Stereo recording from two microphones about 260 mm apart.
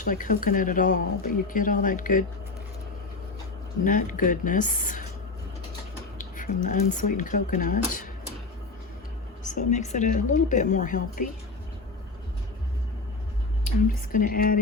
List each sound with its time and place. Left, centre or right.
0.0 s speech: left
3.8 s speech: left
6.1 s speech: left
9.4 s speech: left
13.7 s speech: left